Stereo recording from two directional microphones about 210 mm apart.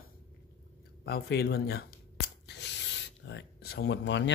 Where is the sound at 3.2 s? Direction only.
55° left (ahead or behind).